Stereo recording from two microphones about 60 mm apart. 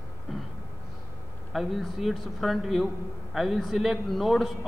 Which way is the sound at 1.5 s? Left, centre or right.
Centre.